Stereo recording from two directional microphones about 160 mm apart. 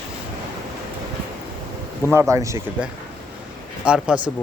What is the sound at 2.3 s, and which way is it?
Speech, 20° right (ahead or behind).